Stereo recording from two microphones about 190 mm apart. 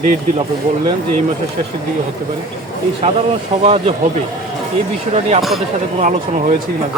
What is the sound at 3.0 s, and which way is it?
Speech, 35° right (ahead or behind).